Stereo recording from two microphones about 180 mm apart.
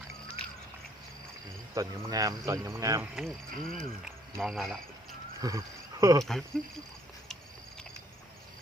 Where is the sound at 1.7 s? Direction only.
15° right (ahead or behind).